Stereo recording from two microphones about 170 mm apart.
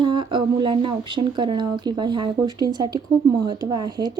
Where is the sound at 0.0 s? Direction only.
30° right (ahead or behind).